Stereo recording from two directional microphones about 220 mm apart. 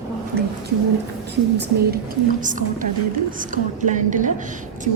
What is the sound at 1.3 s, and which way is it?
A woman's voice, 50° right (ahead or behind).